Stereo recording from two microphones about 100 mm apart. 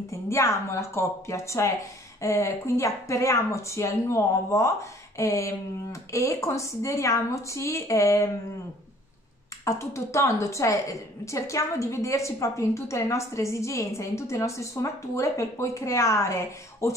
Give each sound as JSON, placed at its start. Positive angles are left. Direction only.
{"t": 0.1, "sound": "speech", "side_deg": 30}
{"t": 9.7, "sound": "speech", "side_deg": 30}